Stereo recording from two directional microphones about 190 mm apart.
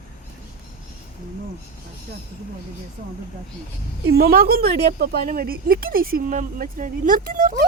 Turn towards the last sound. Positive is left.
turn(degrees=-45)  # may be behind; listen again after turning